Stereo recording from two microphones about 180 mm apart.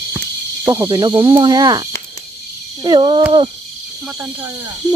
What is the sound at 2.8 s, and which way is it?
Cricket, 25° right (ahead or behind).